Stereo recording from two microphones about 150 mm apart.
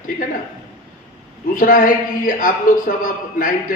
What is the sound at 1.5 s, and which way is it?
A woman's voice, 65° left (ahead or behind).